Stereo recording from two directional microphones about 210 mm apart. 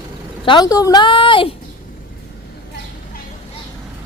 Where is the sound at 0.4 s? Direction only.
20° left (ahead or behind).